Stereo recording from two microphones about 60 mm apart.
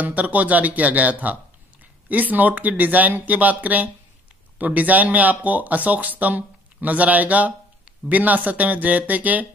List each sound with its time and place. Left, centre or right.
0.0 s speech: right